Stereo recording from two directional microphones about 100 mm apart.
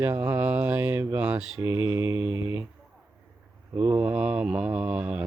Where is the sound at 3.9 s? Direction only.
10° right (ahead or behind).